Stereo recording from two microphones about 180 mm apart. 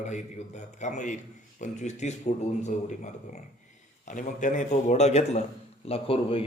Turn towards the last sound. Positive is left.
turn(degrees=30)  # may be behind; listen again after turning